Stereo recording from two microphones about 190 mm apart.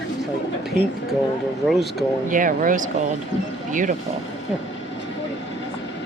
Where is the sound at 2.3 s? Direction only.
45° right (ahead or behind).